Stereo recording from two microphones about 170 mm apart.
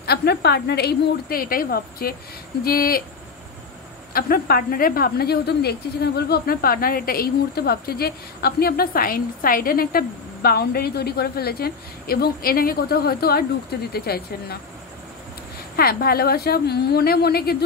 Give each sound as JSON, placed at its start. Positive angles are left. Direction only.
{"t": 0.0, "sound": "a woman's voice", "side_deg": 70}
{"t": 4.1, "sound": "speech", "side_deg": 60}
{"t": 15.7, "sound": "speech", "side_deg": 65}